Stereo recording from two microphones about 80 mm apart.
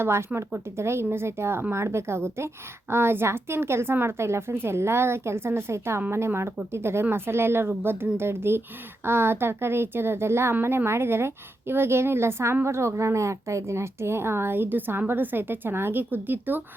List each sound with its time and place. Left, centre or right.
0.0 s a woman's voice: right